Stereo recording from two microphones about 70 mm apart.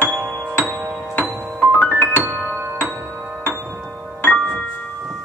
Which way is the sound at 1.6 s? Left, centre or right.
Centre.